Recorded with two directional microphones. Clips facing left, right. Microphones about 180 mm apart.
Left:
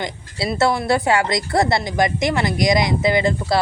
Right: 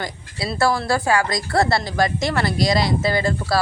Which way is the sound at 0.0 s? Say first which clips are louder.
Left 3 dB; 20° left (ahead or behind).